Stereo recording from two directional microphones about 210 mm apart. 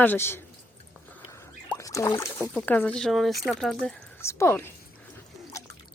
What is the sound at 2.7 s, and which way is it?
A woman's voice, 5° left (ahead or behind).